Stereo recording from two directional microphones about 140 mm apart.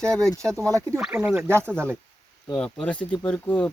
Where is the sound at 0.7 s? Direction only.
20° right (ahead or behind).